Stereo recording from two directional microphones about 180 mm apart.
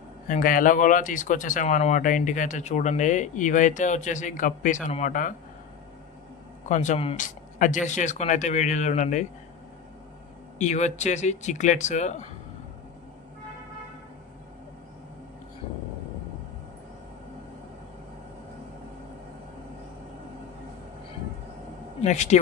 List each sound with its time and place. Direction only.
0.3 s speech: 50° left (ahead or behind)
6.7 s speech: 40° left (ahead or behind)
10.6 s speech: 40° left (ahead or behind)
22.0 s speech: 40° left (ahead or behind)